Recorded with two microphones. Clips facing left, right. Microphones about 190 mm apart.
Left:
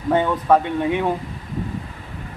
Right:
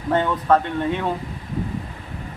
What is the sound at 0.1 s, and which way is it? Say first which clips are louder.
Speech: left 2 dB; 10° left (ahead or behind).